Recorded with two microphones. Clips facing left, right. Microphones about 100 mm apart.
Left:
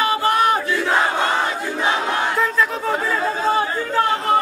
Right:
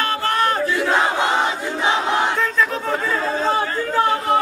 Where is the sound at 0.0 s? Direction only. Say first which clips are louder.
Left 2 dB; 10° left (ahead or behind).